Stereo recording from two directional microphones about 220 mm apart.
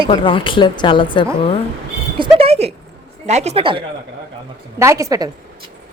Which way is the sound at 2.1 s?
25° right (ahead or behind).